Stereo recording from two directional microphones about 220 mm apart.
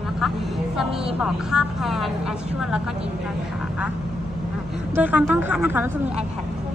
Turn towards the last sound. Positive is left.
turn(degrees=-10)  # may be behind; listen again after turning